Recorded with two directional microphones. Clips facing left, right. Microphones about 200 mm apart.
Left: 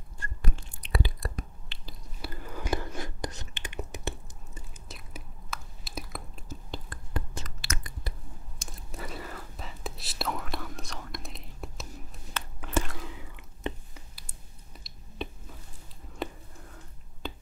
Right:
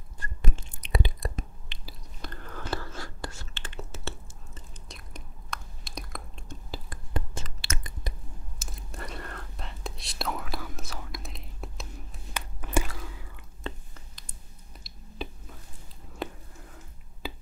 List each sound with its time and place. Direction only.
0.2 s whispering: 20° right (ahead or behind)
2.2 s whispering: 10° left (ahead or behind)
4.6 s chewing: 5° left (ahead or behind)
7.2 s a sound: 25° right (ahead or behind)
8.5 s whispering: centre (ahead or behind)
12.6 s chewing: 10° right (ahead or behind)
13.0 s whispering: 20° left (ahead or behind)
14.7 s a sound: centre (ahead or behind)
16.2 s whispering: centre (ahead or behind)